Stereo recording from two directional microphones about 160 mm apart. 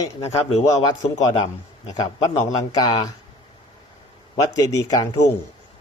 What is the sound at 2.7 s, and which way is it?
Speech, 25° left (ahead or behind).